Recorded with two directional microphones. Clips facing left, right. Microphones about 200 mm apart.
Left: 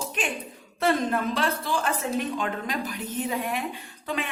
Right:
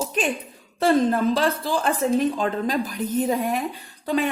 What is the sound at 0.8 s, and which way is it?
A woman's voice, 35° right (ahead or behind).